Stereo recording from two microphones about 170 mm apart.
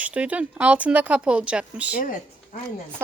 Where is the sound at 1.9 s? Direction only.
60° left (ahead or behind).